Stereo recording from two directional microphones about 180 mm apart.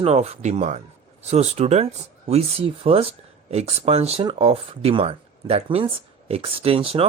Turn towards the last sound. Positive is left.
turn(degrees=-30)  # may be behind; listen again after turning